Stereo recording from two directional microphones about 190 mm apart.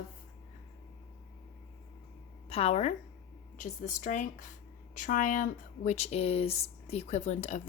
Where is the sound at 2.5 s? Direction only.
30° left (ahead or behind).